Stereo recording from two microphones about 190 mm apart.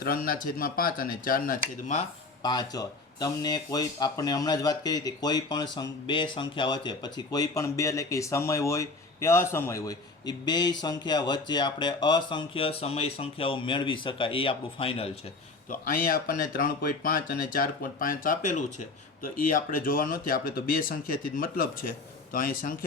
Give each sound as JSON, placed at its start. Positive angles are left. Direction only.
{"t": 0.0, "sound": "speech", "side_deg": 50}
{"t": 2.4, "sound": "speech", "side_deg": 20}
{"t": 15.7, "sound": "speech", "side_deg": 45}